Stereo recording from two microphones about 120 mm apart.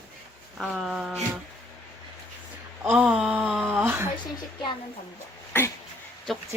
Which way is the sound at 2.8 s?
5° right (ahead or behind).